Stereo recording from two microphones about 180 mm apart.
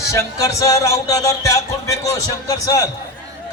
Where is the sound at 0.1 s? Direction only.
20° left (ahead or behind).